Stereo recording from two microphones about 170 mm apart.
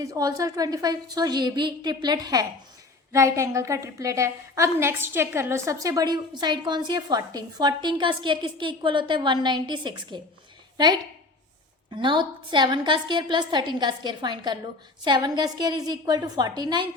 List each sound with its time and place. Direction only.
0.0 s a woman's voice: 20° right (ahead or behind)